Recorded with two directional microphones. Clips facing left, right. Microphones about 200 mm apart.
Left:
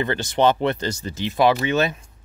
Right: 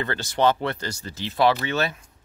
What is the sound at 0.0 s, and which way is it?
Speech, 20° left (ahead or behind).